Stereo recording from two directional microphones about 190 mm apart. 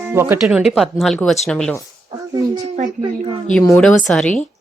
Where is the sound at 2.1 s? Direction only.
20° right (ahead or behind).